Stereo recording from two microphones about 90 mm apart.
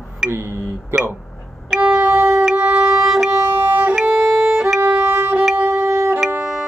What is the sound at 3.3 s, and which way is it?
Violin, 25° right (ahead or behind).